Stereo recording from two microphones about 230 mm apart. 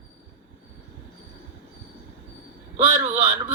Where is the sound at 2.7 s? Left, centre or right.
Right.